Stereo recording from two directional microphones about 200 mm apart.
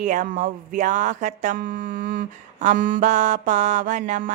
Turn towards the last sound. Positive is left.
turn(degrees=-40)  # may be behind; listen again after turning